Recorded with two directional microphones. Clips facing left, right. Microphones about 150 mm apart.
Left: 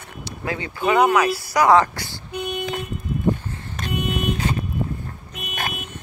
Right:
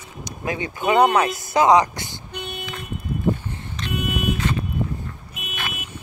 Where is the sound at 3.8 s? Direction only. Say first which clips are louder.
Left 2 dB; 50° left (ahead or behind).